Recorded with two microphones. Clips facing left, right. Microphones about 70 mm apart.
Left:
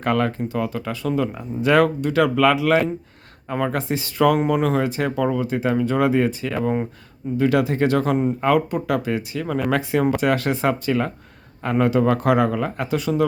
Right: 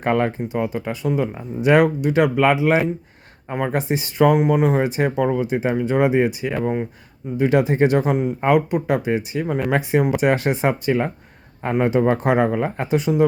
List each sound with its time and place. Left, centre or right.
0.0 s speech: right
4.3 s speech: centre
4.6 s speech: right
6.5 s speech: centre
7.3 s speech: right